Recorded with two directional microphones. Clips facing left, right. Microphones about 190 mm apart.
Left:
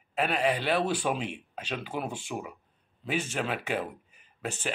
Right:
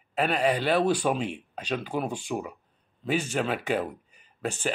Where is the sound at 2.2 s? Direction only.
5° left (ahead or behind).